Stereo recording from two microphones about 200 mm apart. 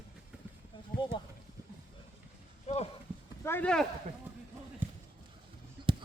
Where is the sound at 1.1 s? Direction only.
25° left (ahead or behind).